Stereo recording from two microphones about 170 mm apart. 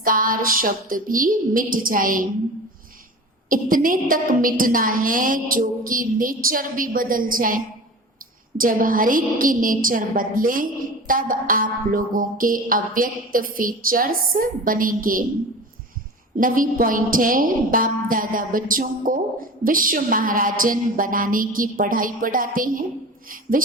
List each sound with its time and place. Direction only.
0.0 s a woman's voice: 55° right (ahead or behind)
3.5 s a woman's voice: 55° right (ahead or behind)
16.4 s a woman's voice: 55° right (ahead or behind)